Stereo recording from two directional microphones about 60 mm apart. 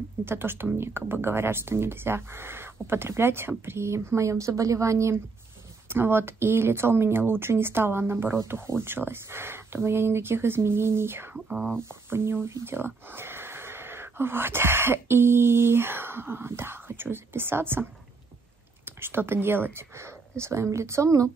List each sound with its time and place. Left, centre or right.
0.2 s speech: right
5.9 s speech: right
11.3 s speech: centre
12.1 s speech: right
18.9 s speech: right